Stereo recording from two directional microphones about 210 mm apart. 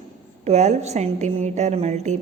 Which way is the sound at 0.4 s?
30° right (ahead or behind).